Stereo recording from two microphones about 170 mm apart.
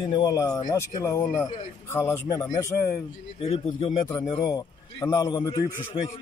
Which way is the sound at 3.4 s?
35° left (ahead or behind).